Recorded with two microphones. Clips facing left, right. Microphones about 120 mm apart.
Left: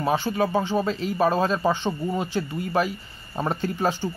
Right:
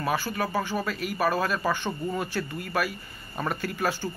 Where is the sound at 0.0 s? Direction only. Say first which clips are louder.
Left 5 dB; 25° left (ahead or behind).